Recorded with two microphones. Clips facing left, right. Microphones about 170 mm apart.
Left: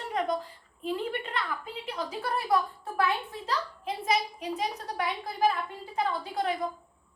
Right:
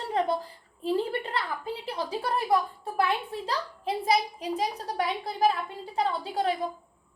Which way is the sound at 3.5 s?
35° right (ahead or behind).